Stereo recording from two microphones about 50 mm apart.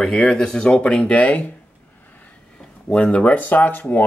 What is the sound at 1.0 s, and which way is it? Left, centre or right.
Speech, left.